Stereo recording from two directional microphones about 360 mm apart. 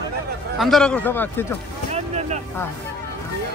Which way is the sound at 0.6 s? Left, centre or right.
Centre.